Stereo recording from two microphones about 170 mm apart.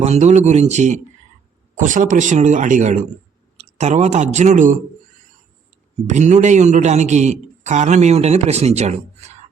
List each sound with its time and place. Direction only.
0.0 s a man's voice: 40° right (ahead or behind)
6.1 s a man's voice: 45° right (ahead or behind)